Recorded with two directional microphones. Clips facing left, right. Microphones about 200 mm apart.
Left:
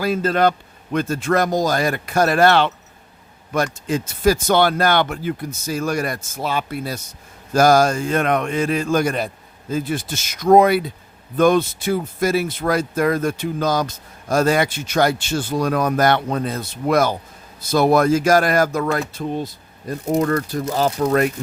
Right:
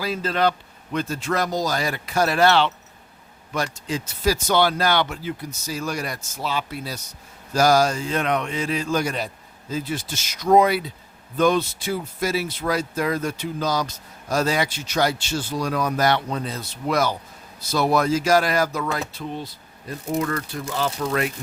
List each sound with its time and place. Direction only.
0.0 s speech: 50° left (ahead or behind)